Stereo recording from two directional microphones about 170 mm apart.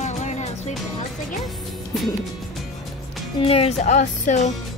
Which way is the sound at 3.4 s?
35° left (ahead or behind).